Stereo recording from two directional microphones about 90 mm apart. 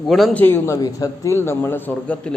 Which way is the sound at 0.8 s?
40° left (ahead or behind).